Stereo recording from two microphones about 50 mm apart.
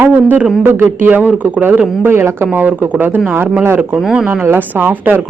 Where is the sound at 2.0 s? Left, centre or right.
Right.